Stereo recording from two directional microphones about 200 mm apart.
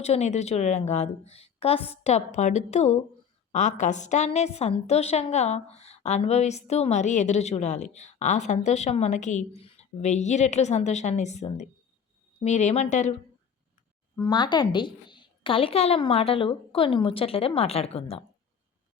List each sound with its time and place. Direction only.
0.0 s a woman's voice: 35° left (ahead or behind)
14.2 s a woman's voice: 20° left (ahead or behind)